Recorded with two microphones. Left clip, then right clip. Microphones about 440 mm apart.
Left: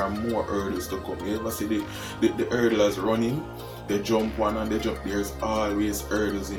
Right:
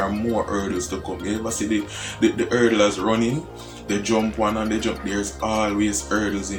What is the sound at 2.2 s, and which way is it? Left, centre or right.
Speech, left.